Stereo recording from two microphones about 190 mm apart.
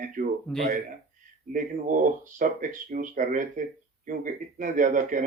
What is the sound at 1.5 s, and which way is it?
Speech, 45° right (ahead or behind).